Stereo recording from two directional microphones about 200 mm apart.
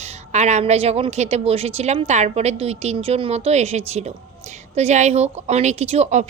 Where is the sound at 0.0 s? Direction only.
35° right (ahead or behind).